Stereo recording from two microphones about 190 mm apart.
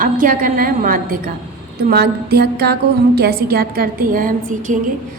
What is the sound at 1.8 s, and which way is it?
Music, 55° right (ahead or behind).